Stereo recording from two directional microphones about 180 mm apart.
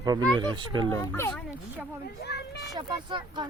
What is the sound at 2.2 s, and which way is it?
Speech, 65° left (ahead or behind).